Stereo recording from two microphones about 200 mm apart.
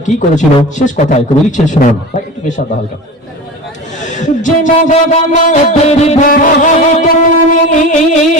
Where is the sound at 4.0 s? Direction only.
40° left (ahead or behind).